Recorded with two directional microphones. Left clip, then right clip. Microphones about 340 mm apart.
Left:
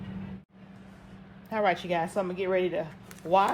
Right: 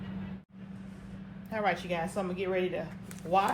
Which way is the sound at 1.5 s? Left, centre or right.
Left.